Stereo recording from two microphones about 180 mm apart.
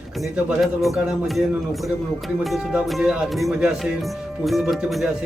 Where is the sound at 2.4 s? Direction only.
Centre (ahead or behind).